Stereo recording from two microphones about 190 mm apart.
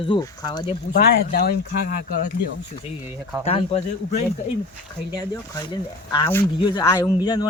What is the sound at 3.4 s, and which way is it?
Speech, 35° left (ahead or behind).